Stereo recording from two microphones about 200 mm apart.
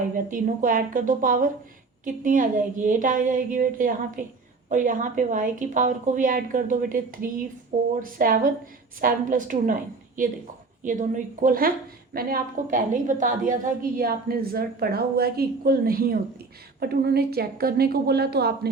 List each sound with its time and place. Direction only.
0.3 s a woman's voice: 45° right (ahead or behind)